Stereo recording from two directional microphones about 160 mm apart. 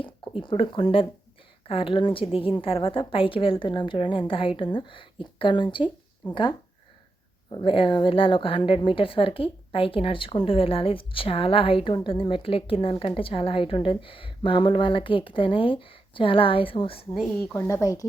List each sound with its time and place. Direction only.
0.0 s a woman's voice: 35° left (ahead or behind)
7.5 s a woman's voice: 35° left (ahead or behind)
17.5 s speech: 15° left (ahead or behind)